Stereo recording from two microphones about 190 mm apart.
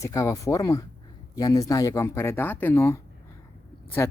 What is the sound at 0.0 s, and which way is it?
Speech, 15° left (ahead or behind).